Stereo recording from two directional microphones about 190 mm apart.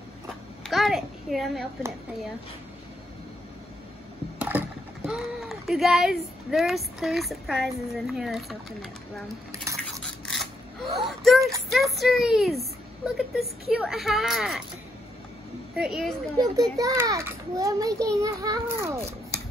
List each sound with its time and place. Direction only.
0.7 s a child's voice: centre (ahead or behind)
4.4 s speech: 10° right (ahead or behind)
10.2 s a sound: centre (ahead or behind)
11.7 s speech: centre (ahead or behind)
15.7 s speech: 5° right (ahead or behind)
16.7 s a child's voice: 15° right (ahead or behind)